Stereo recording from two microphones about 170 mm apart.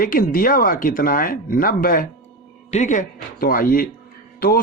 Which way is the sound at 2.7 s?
45° left (ahead or behind).